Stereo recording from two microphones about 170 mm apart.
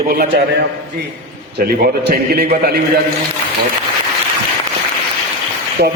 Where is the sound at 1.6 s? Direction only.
60° right (ahead or behind).